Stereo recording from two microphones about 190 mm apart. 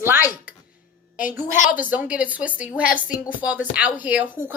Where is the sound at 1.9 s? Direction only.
5° right (ahead or behind).